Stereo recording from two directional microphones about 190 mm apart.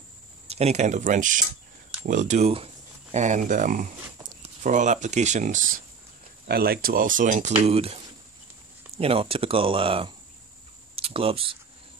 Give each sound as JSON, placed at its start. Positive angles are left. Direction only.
{"t": 0.5, "sound": "speech", "side_deg": -35}
{"t": 6.4, "sound": "speech", "side_deg": -55}